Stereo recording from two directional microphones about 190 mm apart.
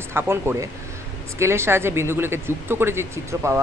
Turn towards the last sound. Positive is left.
turn(degrees=-15)  # may be behind; listen again after turning